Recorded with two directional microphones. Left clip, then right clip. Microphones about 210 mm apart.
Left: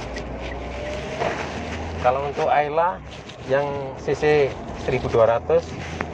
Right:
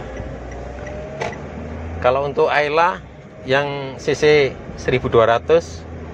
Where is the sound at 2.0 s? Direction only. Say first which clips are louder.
Right 5 dB; 75° right (ahead or behind).